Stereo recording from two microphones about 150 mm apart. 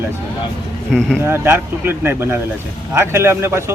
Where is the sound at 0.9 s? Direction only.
Centre (ahead or behind).